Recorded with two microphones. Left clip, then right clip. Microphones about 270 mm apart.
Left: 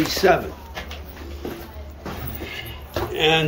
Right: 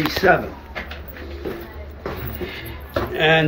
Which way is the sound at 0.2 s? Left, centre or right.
Centre.